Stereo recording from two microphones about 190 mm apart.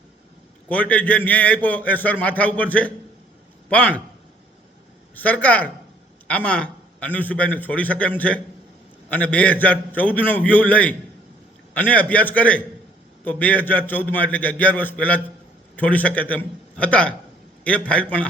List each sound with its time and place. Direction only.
0.7 s a man's voice: 5° left (ahead or behind)
5.1 s a man's voice: 10° left (ahead or behind)